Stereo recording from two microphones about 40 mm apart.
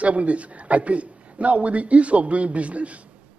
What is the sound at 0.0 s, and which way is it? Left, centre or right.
A man's voice, right.